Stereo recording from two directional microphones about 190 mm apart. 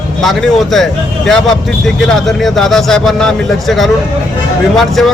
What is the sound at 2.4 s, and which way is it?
Speech, centre (ahead or behind).